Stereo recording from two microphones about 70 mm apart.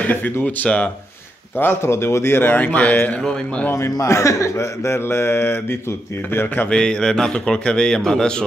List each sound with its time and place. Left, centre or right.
0.0 s speech: left
1.6 s speech: left
4.1 s speech: left
6.7 s a man's voice: centre